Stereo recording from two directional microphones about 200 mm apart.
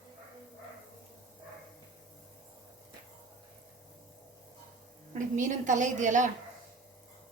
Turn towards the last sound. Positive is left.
turn(degrees=-40)  # may be behind; listen again after turning